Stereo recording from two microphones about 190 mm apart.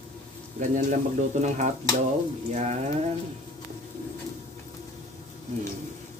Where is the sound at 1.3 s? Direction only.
40° right (ahead or behind).